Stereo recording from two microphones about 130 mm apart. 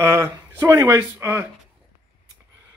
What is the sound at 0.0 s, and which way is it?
Speech, 20° right (ahead or behind).